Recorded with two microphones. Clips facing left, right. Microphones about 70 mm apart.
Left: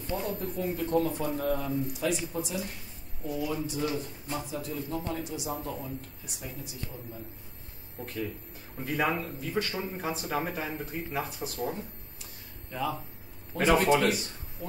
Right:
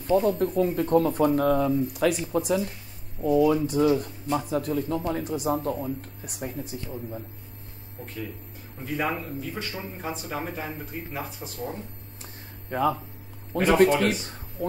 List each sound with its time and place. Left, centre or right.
0.1 s a man's voice: right
8.9 s speech: centre
12.6 s speech: right
13.5 s speech: right
14.6 s a man's voice: right